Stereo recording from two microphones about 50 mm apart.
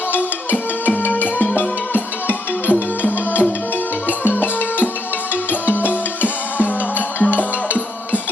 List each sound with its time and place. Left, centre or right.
0.1 s music: left